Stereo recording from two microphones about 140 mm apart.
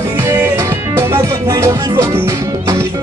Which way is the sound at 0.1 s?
20° right (ahead or behind).